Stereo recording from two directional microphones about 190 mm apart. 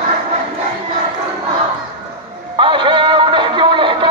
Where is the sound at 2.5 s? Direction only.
25° right (ahead or behind).